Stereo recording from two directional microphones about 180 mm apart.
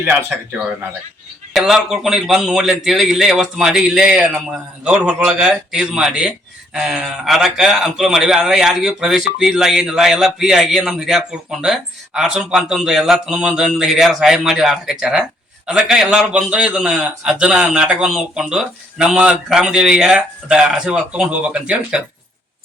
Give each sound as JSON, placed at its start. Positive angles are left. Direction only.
{"t": 0.0, "sound": "speech", "side_deg": -15}
{"t": 1.5, "sound": "a man's voice", "side_deg": 0}